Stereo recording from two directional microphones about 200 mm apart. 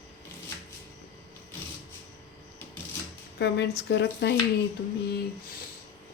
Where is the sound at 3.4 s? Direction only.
60° left (ahead or behind).